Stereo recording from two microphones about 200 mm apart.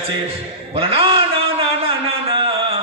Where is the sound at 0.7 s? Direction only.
30° right (ahead or behind).